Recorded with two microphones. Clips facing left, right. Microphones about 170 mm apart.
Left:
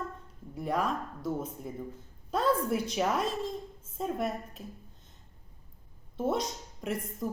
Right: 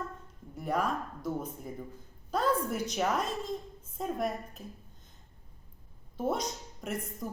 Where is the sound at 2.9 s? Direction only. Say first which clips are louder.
Left 1 dB; 5° left (ahead or behind).